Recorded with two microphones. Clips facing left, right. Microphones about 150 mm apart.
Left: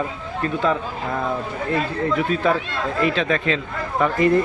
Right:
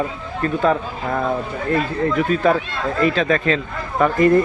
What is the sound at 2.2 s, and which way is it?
A man's voice, 45° right (ahead or behind).